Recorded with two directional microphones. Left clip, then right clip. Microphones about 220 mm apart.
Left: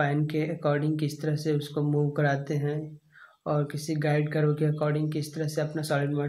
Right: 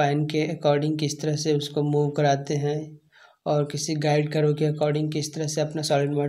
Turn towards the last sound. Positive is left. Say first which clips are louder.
# right 5 dB
turn(degrees=-30)  # may be behind; listen again after turning